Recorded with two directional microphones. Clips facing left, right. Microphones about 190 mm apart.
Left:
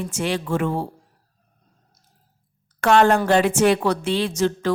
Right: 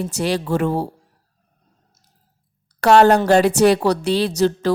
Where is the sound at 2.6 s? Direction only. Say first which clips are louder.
Right 4 dB; 40° right (ahead or behind).